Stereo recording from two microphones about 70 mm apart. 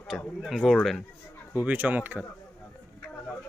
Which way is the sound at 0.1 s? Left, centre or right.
Centre.